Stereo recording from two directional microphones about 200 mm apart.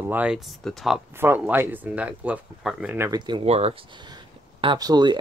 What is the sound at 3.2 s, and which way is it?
Speech, 25° right (ahead or behind).